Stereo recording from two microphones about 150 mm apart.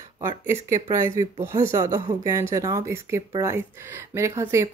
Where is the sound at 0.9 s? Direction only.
20° right (ahead or behind).